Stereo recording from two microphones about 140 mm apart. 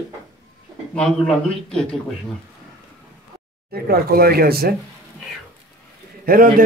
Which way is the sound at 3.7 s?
90° right.